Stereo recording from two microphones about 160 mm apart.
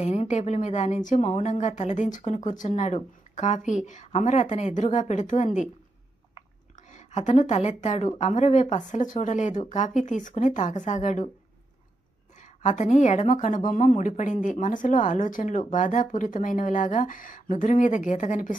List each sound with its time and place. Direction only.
0.0 s a woman's voice: 45° left (ahead or behind)
6.9 s a woman's voice: 45° left (ahead or behind)
12.4 s a woman's voice: 50° left (ahead or behind)